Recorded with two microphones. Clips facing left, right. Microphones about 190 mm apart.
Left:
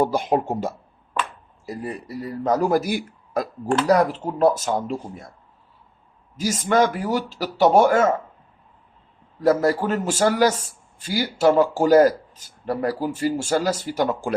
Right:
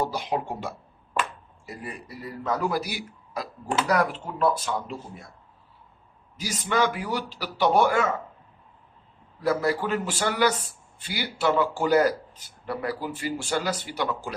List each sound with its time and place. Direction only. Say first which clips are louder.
0.0 s speech: left 7 dB; 50° left (ahead or behind)
3.8 s speech: left 6 dB; 40° left (ahead or behind)
6.4 s speech: left 6 dB; 45° left (ahead or behind)
9.4 s speech: left 6 dB; 45° left (ahead or behind)